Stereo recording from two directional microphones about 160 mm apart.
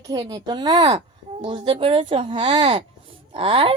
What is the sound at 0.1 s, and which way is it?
A woman's voice, 25° right (ahead or behind).